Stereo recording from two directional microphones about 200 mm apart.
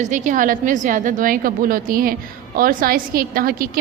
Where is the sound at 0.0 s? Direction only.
40° right (ahead or behind).